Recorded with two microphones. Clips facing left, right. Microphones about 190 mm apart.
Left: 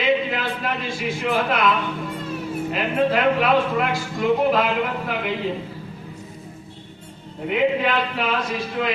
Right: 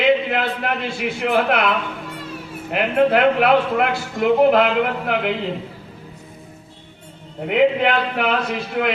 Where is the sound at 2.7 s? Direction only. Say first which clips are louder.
Right 5 dB; 60° right (ahead or behind).